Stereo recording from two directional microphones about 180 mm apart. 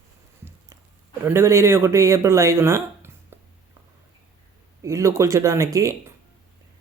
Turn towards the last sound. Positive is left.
turn(degrees=-15)  # may be behind; listen again after turning